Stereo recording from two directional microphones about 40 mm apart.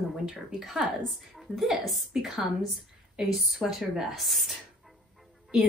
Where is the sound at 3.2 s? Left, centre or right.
Right.